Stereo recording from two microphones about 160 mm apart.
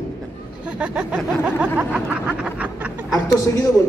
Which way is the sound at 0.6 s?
5° right (ahead or behind).